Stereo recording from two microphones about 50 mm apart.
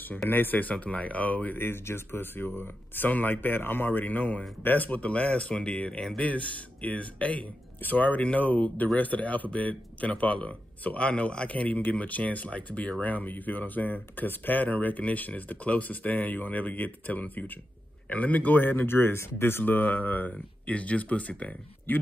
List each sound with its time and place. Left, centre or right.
0.3 s speech: left
3.1 s speech: left
19.6 s speech: left
21.9 s speech: left